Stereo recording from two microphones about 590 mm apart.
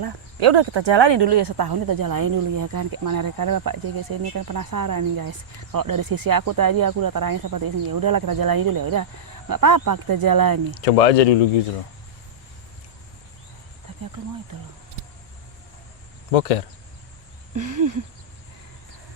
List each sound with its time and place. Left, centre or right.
0.3 s speech: right
10.8 s speech: left
16.3 s speech: left
17.5 s speech: right